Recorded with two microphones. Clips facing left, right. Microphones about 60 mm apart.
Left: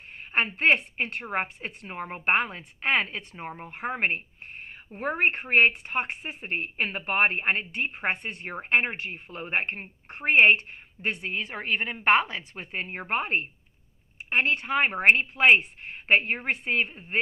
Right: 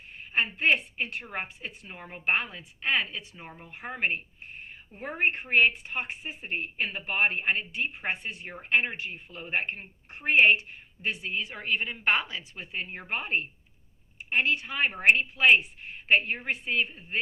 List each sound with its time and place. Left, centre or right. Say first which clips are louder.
0.3 s a woman's voice: left 3 dB; left
4.6 s a woman's voice: left 8 dB; left